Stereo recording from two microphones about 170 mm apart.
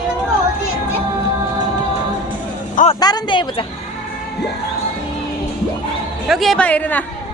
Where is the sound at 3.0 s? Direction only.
25° left (ahead or behind).